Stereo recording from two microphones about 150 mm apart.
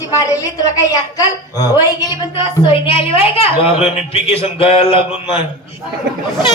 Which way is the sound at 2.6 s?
35° left (ahead or behind).